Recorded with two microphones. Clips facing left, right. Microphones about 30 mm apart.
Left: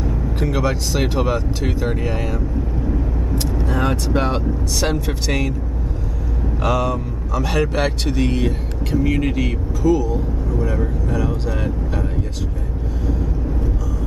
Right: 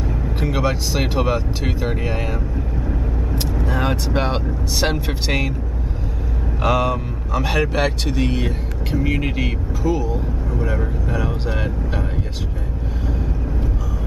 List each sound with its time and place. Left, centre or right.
0.4 s speech: centre
3.4 s speech: centre
6.6 s speech: centre
7.5 s speech: centre; by 12.1 s right